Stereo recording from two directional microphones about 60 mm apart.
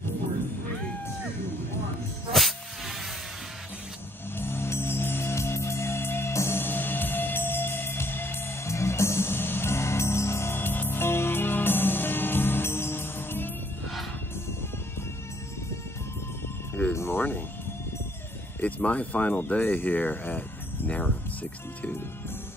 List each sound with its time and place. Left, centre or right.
2.3 s music: centre
4.4 s music: left
16.9 s music: left
18.6 s speech: left